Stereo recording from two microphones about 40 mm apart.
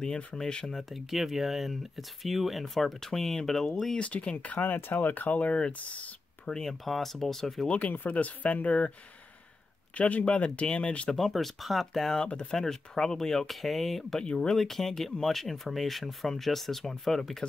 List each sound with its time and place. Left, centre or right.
0.4 s speech: centre
0.9 s speech: centre
4.0 s speech: left
4.6 s speech: left
6.4 s speech: centre
7.6 s speech: left
9.9 s speech: left
11.3 s speech: centre
14.2 s speech: left
14.6 s speech: centre